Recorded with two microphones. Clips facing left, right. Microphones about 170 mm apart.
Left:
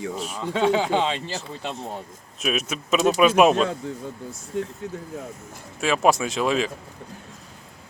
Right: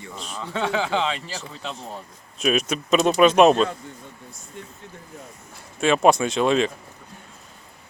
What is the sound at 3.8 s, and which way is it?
Speech, 90° left.